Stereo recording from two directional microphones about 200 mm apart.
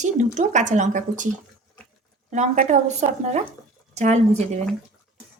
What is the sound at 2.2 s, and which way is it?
Speech, 40° right (ahead or behind).